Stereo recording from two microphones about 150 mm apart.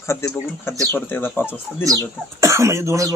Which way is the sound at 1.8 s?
20° right (ahead or behind).